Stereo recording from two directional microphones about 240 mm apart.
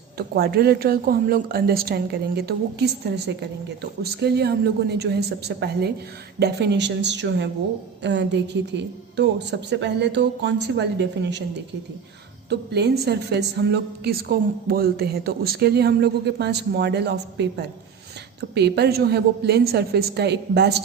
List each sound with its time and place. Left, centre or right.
0.2 s a woman's voice: right